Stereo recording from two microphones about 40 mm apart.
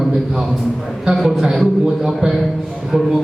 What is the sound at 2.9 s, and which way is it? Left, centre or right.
Speech, centre.